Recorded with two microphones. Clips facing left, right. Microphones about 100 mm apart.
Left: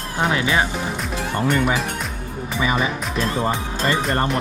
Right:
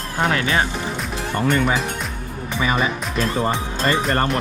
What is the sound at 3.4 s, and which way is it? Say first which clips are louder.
Speech: right 1 dB; 15° left (ahead or behind).